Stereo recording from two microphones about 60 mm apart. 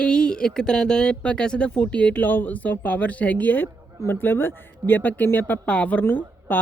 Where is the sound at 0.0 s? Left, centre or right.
Centre.